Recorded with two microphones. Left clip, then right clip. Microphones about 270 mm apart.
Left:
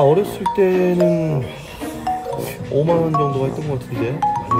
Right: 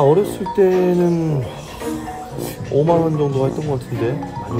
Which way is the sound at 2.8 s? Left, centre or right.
Centre.